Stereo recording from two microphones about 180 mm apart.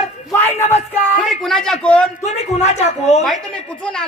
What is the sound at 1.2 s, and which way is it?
Speech, centre (ahead or behind).